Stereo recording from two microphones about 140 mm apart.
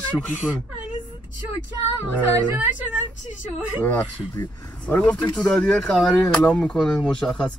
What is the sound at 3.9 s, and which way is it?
Speech, 20° left (ahead or behind).